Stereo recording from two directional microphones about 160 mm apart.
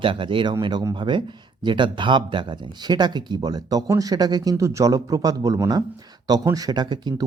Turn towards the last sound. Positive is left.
turn(degrees=-25)  # may be behind; listen again after turning